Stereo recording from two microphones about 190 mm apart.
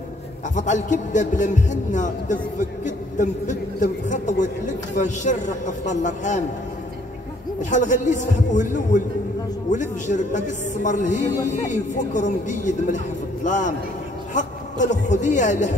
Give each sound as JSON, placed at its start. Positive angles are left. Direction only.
{"t": 0.6, "sound": "a man's voice", "side_deg": 40}
{"t": 7.7, "sound": "a man's voice", "side_deg": 40}